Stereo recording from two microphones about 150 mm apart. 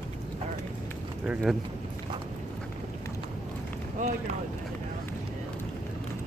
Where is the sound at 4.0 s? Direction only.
60° right (ahead or behind).